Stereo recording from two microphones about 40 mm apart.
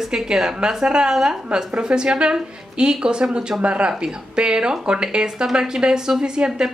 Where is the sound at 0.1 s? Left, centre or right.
Centre.